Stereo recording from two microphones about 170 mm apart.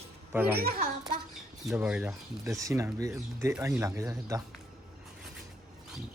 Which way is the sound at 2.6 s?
20° right (ahead or behind).